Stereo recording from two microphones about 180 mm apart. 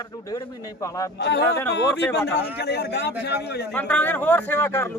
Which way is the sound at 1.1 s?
70° left (ahead or behind).